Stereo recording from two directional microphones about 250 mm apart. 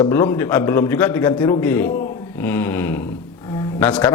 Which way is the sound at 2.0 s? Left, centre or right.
Centre.